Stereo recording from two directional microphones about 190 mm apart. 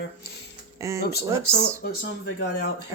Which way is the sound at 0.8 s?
15° right (ahead or behind).